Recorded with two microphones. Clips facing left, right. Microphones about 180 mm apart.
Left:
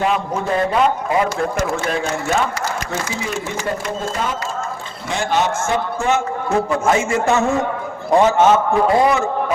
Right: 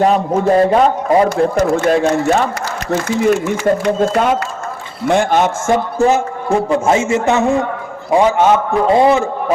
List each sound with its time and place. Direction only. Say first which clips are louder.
0.0 s a man's voice: right 7 dB; 40° right (ahead or behind)
2.9 s a man's voice: right 10 dB; 55° right (ahead or behind); by 9.2 s 25° right (ahead or behind)